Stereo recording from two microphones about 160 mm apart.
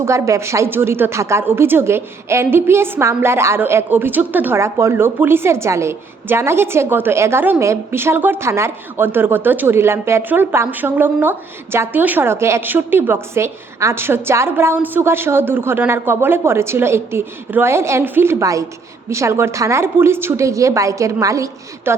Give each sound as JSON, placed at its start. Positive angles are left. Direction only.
{"t": 0.0, "sound": "a woman's voice", "side_deg": -20}